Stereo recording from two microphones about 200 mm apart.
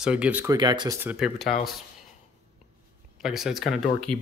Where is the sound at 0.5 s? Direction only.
20° right (ahead or behind).